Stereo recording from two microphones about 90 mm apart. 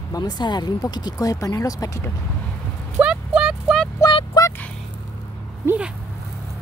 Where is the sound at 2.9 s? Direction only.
10° right (ahead or behind).